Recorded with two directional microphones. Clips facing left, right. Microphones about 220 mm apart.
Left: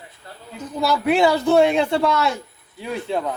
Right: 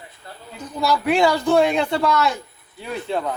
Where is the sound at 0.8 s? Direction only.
25° left (ahead or behind).